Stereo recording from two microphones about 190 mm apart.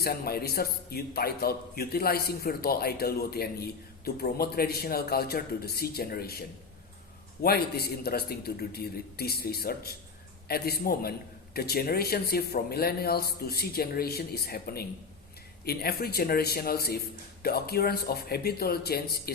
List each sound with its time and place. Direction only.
0.0 s a man's voice: 55° left (ahead or behind)
7.4 s a man's voice: 55° left (ahead or behind)